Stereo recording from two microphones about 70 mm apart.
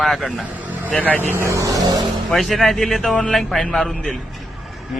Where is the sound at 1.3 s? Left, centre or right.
Right.